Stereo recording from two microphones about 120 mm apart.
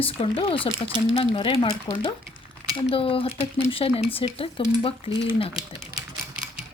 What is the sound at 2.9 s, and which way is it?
Speech, 50° left (ahead or behind).